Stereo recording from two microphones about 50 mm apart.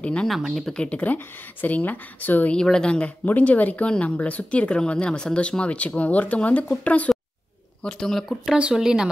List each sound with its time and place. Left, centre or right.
0.0 s speech: left
0.3 s speech: centre
0.7 s speech: left
2.5 s speech: centre
3.3 s speech: left
8.1 s speech: centre
8.5 s speech: centre